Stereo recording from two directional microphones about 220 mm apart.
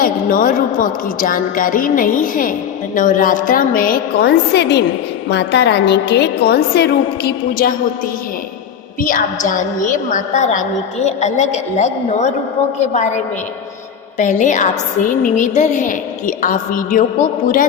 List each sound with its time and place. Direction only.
0.0 s a woman's voice: 40° left (ahead or behind)
9.0 s a woman's voice: 40° left (ahead or behind)